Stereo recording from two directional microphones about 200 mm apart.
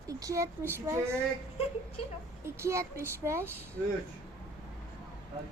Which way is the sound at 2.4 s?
15° right (ahead or behind).